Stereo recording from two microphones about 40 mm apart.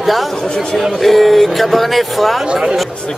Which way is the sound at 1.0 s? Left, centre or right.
Centre.